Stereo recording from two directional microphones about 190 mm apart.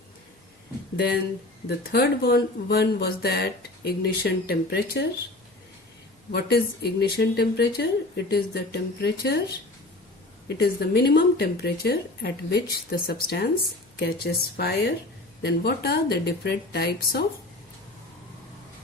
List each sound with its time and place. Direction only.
1.6 s speech: 55° left (ahead or behind)
6.3 s speech: 55° left (ahead or behind)
10.6 s speech: 60° left (ahead or behind)